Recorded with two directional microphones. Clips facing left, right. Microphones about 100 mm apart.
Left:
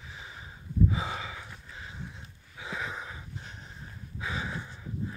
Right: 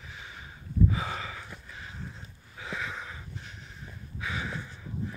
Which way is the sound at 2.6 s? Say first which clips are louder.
Even; 20° left (ahead or behind).